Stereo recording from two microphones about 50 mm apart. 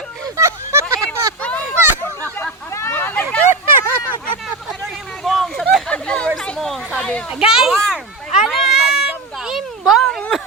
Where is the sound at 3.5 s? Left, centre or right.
Right.